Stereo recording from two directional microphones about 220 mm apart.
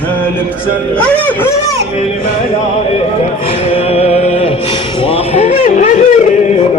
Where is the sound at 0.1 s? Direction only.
10° left (ahead or behind).